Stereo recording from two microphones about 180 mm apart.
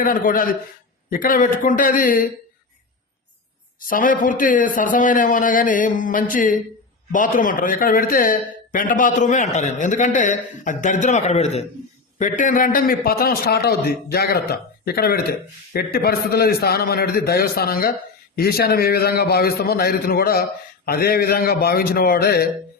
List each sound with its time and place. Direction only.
0.0 s a man's voice: 50° left (ahead or behind)
3.8 s a man's voice: 50° left (ahead or behind)